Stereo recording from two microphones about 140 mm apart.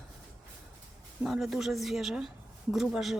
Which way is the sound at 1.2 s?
Centre (ahead or behind).